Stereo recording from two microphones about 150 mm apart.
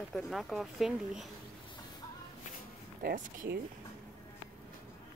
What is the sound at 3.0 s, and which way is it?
Speech, 75° right (ahead or behind).